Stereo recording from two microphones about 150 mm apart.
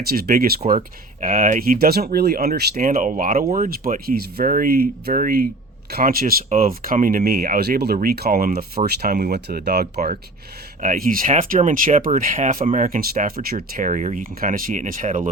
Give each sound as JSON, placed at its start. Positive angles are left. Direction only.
{"t": 0.0, "sound": "speech", "side_deg": -90}
{"t": 0.7, "sound": "speech", "side_deg": -70}
{"t": 10.8, "sound": "speech", "side_deg": -70}